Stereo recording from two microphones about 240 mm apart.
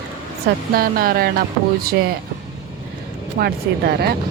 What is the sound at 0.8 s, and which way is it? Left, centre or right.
Speech, right.